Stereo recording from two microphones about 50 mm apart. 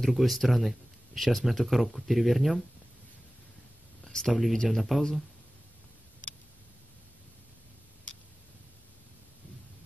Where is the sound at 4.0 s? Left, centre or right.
Centre.